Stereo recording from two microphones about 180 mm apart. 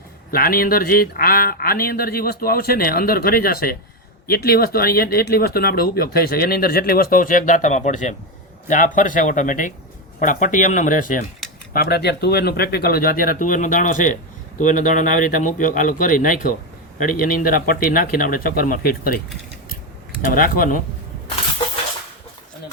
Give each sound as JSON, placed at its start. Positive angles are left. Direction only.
{"t": 0.3, "sound": "speech", "side_deg": 55}
{"t": 11.7, "sound": "speech", "side_deg": 60}
{"t": 20.3, "sound": "speech", "side_deg": 50}